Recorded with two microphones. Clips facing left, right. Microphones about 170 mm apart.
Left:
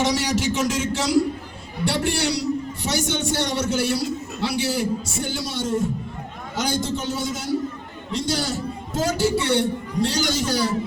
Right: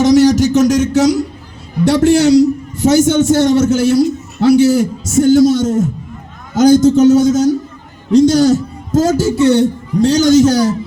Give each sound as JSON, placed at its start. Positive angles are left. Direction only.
{"t": 0.0, "sound": "music", "side_deg": -40}
{"t": 1.9, "sound": "a man's voice", "side_deg": -45}